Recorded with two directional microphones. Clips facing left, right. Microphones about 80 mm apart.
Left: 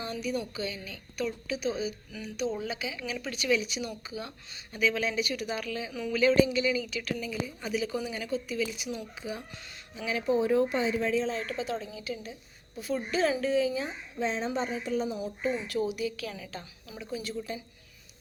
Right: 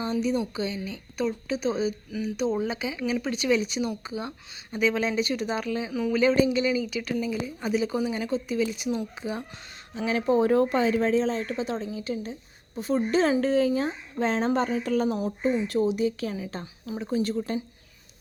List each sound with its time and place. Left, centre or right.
0.0 s a woman's voice: right
15.4 s a woman's voice: right